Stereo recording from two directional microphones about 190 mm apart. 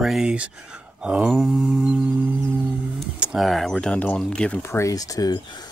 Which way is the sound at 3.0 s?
5° right (ahead or behind).